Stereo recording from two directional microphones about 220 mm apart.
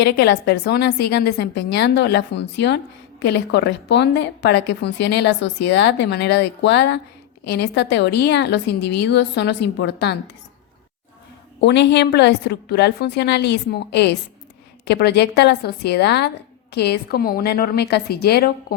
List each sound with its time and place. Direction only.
0.0 s a woman's voice: 50° left (ahead or behind)
11.6 s a woman's voice: 50° left (ahead or behind)